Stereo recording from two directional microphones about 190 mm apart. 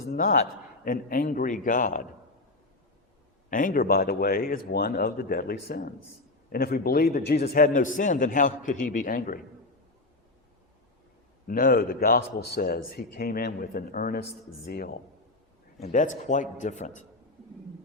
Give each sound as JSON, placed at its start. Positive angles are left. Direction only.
{"t": 0.1, "sound": "a man's voice", "side_deg": 45}
{"t": 3.5, "sound": "a man's voice", "side_deg": 45}
{"t": 11.4, "sound": "a man's voice", "side_deg": 50}
{"t": 15.8, "sound": "a man's voice", "side_deg": 40}